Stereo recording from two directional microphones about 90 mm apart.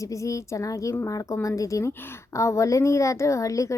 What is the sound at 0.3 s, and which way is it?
A woman's voice, 40° left (ahead or behind).